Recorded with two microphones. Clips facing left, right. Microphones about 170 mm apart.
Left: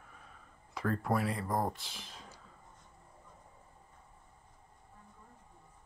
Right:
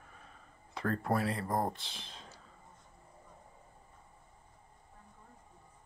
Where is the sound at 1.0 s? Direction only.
25° right (ahead or behind).